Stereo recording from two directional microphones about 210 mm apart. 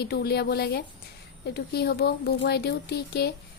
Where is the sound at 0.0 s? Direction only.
50° left (ahead or behind).